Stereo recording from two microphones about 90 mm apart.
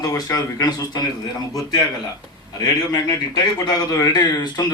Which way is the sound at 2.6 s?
40° left (ahead or behind).